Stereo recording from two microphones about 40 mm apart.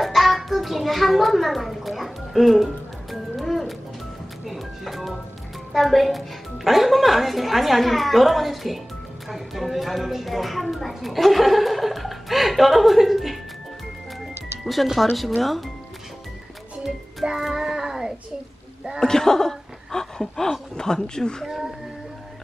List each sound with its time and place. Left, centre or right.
0.0 s a sound: centre
4.5 s music: centre
5.7 s a woman's voice: centre
14.7 s a woman's voice: centre
16.8 s a child's voice: centre
18.9 s speech: centre
21.5 s a child's voice: centre